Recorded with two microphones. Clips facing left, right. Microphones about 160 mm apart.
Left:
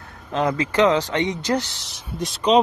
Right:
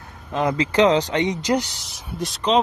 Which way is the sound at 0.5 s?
20° right (ahead or behind).